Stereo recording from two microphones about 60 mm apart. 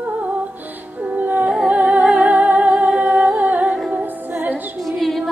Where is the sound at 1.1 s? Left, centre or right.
Right.